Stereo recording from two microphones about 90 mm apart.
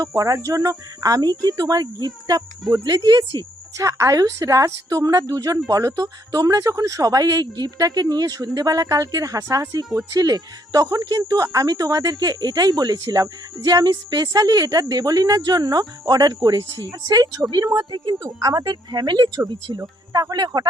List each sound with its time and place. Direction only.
0.0 s speech: 40° right (ahead or behind)
18.2 s speech: 40° right (ahead or behind)
19.8 s speech: 35° right (ahead or behind)
20.3 s speech: 50° right (ahead or behind)